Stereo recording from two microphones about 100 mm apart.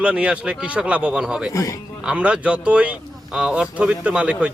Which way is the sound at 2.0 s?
10° right (ahead or behind).